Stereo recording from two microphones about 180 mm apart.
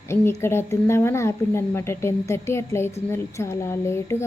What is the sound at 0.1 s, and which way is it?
Speech, 15° left (ahead or behind).